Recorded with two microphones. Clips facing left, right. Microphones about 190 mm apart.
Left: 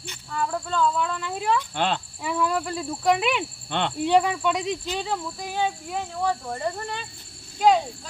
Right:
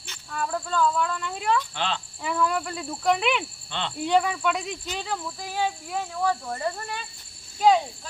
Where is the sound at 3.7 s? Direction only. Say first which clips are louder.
Left 6 dB; 55° left (ahead or behind).